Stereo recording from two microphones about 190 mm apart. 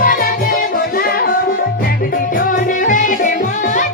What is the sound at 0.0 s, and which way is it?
Music, 45° left (ahead or behind).